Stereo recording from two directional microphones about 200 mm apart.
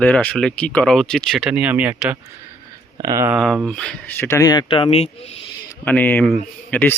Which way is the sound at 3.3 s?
Centre (ahead or behind).